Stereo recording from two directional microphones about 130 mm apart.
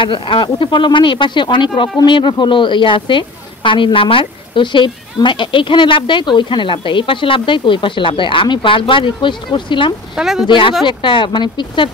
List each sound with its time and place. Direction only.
0.0 s speech: 40° left (ahead or behind)
10.1 s speech: 5° right (ahead or behind)
10.4 s speech: 40° left (ahead or behind)